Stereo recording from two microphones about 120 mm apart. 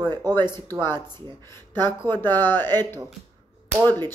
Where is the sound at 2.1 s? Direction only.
15° left (ahead or behind).